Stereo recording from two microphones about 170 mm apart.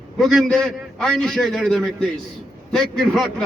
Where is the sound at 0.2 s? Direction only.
Centre (ahead or behind).